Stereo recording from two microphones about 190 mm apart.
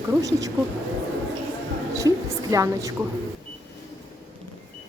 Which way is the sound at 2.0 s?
15° right (ahead or behind).